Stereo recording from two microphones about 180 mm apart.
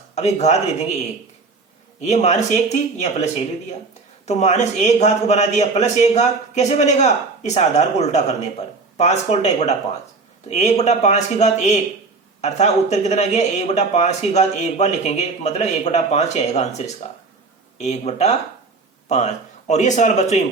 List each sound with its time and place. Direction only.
0.1 s speech: 40° left (ahead or behind)
2.0 s speech: 40° left (ahead or behind)
4.3 s speech: 40° left (ahead or behind)